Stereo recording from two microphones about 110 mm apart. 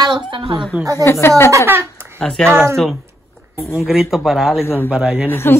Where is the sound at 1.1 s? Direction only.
20° left (ahead or behind).